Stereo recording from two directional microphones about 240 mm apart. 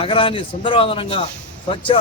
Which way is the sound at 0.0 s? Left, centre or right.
Left.